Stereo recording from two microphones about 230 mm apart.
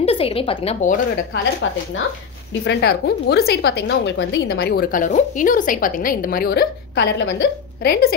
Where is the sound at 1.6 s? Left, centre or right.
Left.